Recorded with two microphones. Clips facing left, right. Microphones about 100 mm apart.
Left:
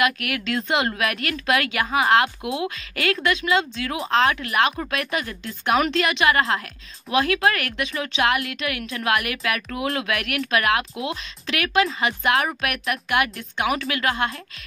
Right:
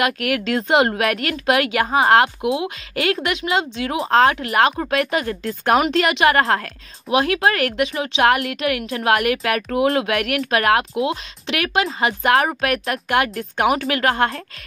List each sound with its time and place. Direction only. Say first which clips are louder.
0.0 s speech: right 3 dB; 30° right (ahead or behind)
5.2 s speech: right 6 dB; 45° right (ahead or behind)
13.6 s speech: right 5 dB; 40° right (ahead or behind)